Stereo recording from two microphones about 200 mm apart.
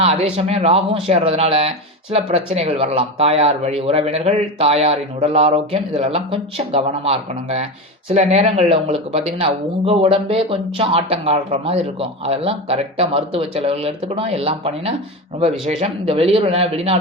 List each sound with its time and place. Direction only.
0.0 s speech: 30° right (ahead or behind)